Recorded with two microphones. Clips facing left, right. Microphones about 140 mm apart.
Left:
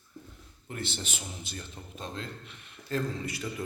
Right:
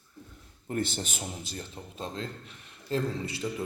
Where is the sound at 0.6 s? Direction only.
45° right (ahead or behind); by 3.5 s 25° right (ahead or behind).